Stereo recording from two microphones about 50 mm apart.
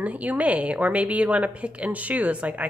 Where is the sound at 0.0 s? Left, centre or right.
Right.